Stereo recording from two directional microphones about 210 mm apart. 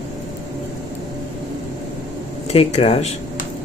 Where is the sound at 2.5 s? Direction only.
30° left (ahead or behind).